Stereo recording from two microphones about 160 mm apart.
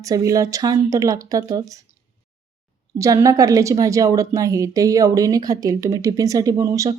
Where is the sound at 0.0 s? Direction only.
20° right (ahead or behind).